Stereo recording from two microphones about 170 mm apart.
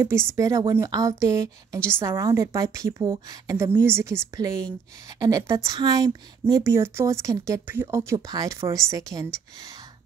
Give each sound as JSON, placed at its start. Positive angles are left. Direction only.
{"t": 0.0, "sound": "a woman's voice", "side_deg": -15}